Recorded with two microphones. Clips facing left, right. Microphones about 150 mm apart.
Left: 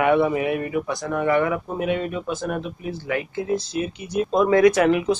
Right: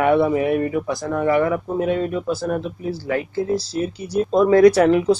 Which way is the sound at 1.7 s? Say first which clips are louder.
Right 4 dB; 35° right (ahead or behind).